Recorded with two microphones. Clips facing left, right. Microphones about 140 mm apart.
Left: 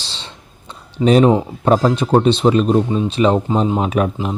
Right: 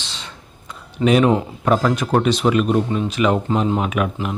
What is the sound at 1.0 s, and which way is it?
Speech, 35° left (ahead or behind).